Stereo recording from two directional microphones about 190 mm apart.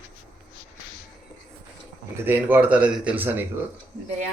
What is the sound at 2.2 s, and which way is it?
A man's voice, 10° right (ahead or behind).